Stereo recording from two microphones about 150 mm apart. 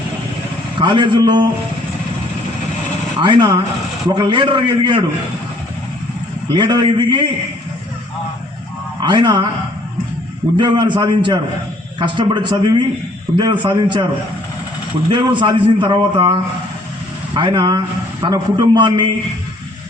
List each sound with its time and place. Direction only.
0.8 s a man's voice: 30° right (ahead or behind)
3.2 s a man's voice: 30° right (ahead or behind)
6.5 s a man's voice: 30° right (ahead or behind)
9.0 s a man's voice: 30° right (ahead or behind)
10.6 s a man's voice: 30° right (ahead or behind)
15.1 s a man's voice: 30° right (ahead or behind)